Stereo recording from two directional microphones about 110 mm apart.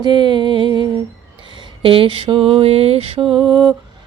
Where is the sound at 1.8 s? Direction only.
55° right (ahead or behind).